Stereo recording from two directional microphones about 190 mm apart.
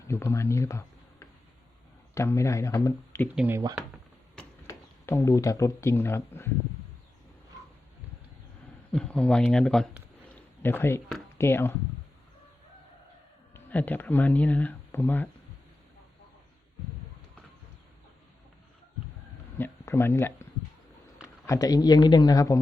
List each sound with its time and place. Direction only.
0.1 s speech: 15° left (ahead or behind)
2.1 s speech: 15° left (ahead or behind)
3.3 s speech: 10° right (ahead or behind)
3.8 s a sound: centre (ahead or behind)
4.6 s speech: 15° left (ahead or behind)
8.9 s a sound: 5° left (ahead or behind)
11.3 s speech: 10° left (ahead or behind)
13.5 s speech: 10° left (ahead or behind)
19.5 s a sound: 10° left (ahead or behind)
21.2 s speech: 15° left (ahead or behind)